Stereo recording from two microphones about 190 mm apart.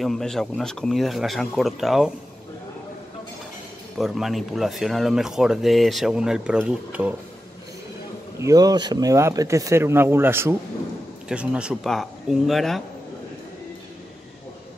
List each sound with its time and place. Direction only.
0.0 s speech: centre (ahead or behind)
4.0 s speech: centre (ahead or behind)
8.4 s speech: 20° right (ahead or behind); by 12.8 s centre (ahead or behind)